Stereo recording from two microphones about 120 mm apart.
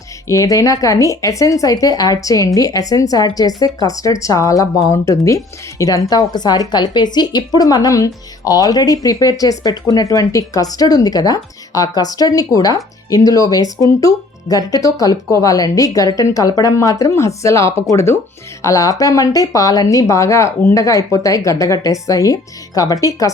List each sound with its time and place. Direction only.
0.3 s a woman's voice: 25° left (ahead or behind)